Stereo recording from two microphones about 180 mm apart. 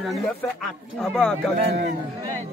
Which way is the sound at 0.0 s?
Centre (ahead or behind).